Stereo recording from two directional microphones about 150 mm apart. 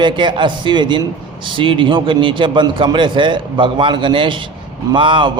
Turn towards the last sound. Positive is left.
turn(degrees=-30)  # may be behind; listen again after turning